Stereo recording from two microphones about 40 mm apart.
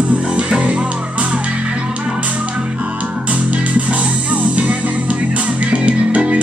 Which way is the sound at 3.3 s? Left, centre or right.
Right.